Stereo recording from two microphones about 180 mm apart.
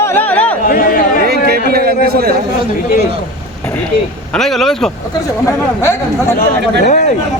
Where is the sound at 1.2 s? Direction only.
60° right (ahead or behind).